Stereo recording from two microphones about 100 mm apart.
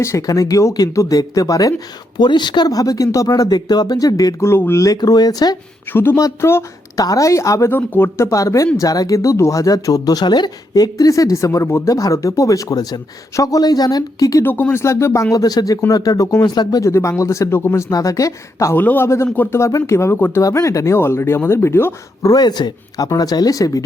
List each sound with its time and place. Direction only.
0.0 s speech: 30° left (ahead or behind)
2.1 s speech: 50° left (ahead or behind); by 4.9 s 30° left (ahead or behind)
4.9 s speech: 40° left (ahead or behind)
5.9 s speech: 20° left (ahead or behind)
7.7 s speech: 20° left (ahead or behind)
8.3 s speech: 35° left (ahead or behind)
14.4 s speech: 20° left (ahead or behind)
17.9 s speech: 35° left (ahead or behind)
18.8 s speech: 20° left (ahead or behind)
20.4 s speech: 30° left (ahead or behind)
22.3 s speech: 45° left (ahead or behind)